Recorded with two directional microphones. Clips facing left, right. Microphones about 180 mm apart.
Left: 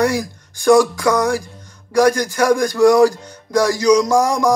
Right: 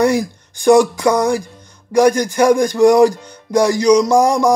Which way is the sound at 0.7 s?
20° right (ahead or behind).